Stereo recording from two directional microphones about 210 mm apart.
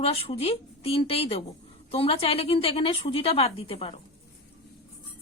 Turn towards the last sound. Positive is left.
turn(degrees=25)  # may be behind; listen again after turning